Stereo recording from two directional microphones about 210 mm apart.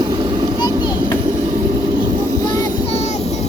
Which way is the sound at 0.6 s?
20° left (ahead or behind).